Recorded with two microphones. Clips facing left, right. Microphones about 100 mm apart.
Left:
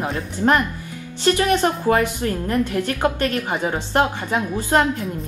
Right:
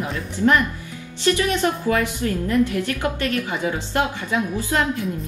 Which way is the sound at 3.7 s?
50° left (ahead or behind).